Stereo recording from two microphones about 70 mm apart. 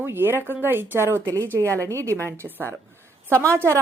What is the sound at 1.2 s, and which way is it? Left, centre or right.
Speech, right.